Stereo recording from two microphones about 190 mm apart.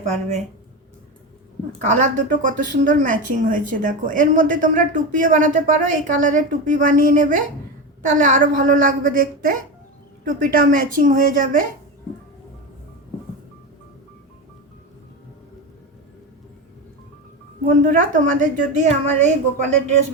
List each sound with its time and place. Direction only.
1.8 s speech: 40° right (ahead or behind)
17.6 s a woman's voice: 45° right (ahead or behind)